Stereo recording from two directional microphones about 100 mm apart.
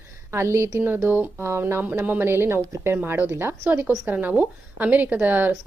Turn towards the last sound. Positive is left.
turn(degrees=-20)  # may be behind; listen again after turning